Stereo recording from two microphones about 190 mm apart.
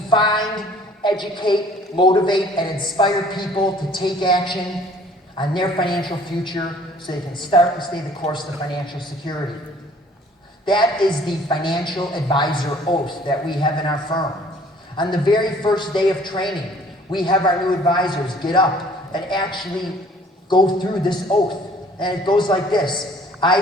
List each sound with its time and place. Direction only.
0.1 s a man's voice: 25° left (ahead or behind)
11.3 s a man's voice: 25° left (ahead or behind)